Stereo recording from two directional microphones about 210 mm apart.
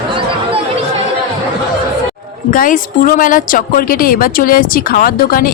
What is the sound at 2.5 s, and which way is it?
A woman's voice, 40° left (ahead or behind).